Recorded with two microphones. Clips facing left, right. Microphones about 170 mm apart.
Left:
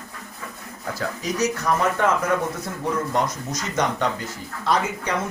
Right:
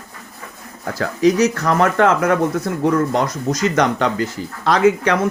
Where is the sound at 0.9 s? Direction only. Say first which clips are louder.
Right 11 dB; 90° right.